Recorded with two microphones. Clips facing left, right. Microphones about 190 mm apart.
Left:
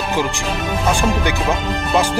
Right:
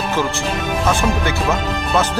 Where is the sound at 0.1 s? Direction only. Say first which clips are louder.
Left 1 dB; 15° left (ahead or behind).